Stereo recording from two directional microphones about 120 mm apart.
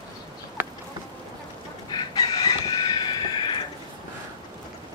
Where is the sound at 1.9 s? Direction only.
35° left (ahead or behind).